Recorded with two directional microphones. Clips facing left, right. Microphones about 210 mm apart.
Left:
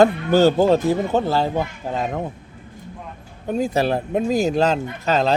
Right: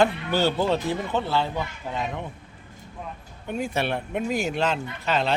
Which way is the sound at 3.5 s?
40° left (ahead or behind).